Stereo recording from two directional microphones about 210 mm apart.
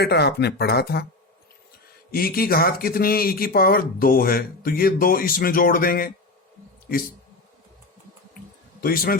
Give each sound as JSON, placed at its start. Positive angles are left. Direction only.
{"t": 0.0, "sound": "speech", "side_deg": 50}
{"t": 2.1, "sound": "speech", "side_deg": 45}
{"t": 8.8, "sound": "speech", "side_deg": 45}